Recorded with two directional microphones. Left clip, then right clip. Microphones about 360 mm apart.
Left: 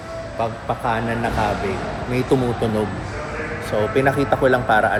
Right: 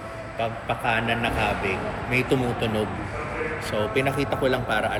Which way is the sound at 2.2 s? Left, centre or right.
Centre.